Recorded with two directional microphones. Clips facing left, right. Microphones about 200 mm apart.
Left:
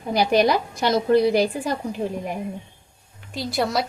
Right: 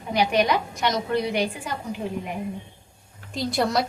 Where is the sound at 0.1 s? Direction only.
35° left (ahead or behind).